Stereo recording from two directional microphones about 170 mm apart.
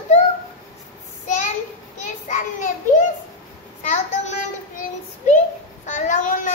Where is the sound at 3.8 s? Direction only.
45° left (ahead or behind).